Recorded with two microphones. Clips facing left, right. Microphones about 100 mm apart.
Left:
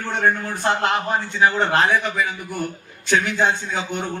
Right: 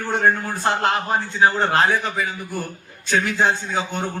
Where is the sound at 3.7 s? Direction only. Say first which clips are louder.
Right 1 dB; 35° right (ahead or behind).